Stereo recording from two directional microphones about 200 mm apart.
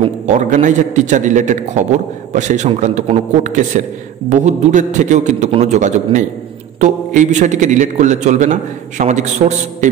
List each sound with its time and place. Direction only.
0.0 s a man's voice: 35° right (ahead or behind)